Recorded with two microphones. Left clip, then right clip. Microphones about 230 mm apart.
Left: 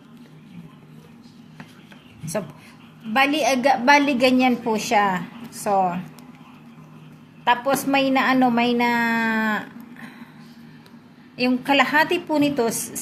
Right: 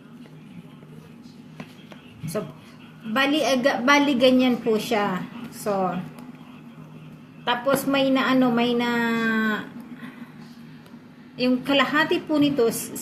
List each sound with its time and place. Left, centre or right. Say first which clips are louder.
3.1 s a woman's voice: left 2 dB; left
7.4 s a woman's voice: left 3 dB; left
11.3 s a woman's voice: left 2 dB; left